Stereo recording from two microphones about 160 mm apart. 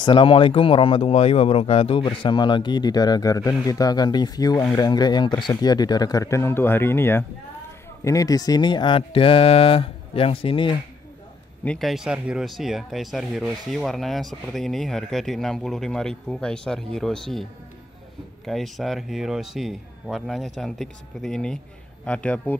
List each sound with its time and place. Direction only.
0.0 s speech: 30° left (ahead or behind)
11.6 s a man's voice: 5° left (ahead or behind)